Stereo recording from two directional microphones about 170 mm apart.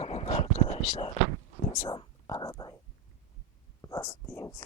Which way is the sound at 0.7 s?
35° left (ahead or behind).